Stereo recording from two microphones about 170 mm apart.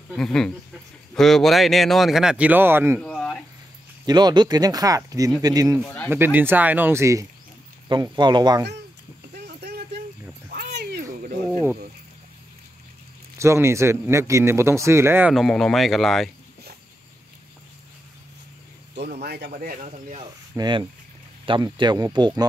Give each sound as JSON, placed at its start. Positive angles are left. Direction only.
{"t": 0.1, "sound": "speech", "side_deg": 5}
{"t": 3.0, "sound": "a sound", "side_deg": 5}
{"t": 4.0, "sound": "a man's voice", "side_deg": -25}
{"t": 9.3, "sound": "a sound", "side_deg": -75}
{"t": 13.4, "sound": "a man's voice", "side_deg": -15}
{"t": 15.3, "sound": "speech", "side_deg": 0}
{"t": 19.2, "sound": "speech", "side_deg": -65}
{"t": 20.5, "sound": "speech", "side_deg": -25}